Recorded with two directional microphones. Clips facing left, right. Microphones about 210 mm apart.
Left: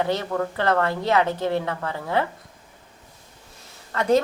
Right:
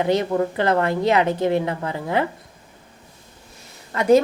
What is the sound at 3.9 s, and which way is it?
Speech, 15° right (ahead or behind).